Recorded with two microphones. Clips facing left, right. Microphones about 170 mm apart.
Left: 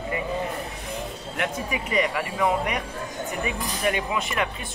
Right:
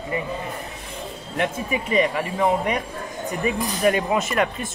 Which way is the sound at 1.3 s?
25° right (ahead or behind).